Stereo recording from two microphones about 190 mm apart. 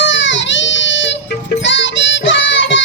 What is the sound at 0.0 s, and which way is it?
Baby cry, 70° left (ahead or behind).